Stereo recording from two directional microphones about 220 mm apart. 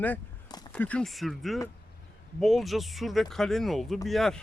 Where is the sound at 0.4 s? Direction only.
20° left (ahead or behind).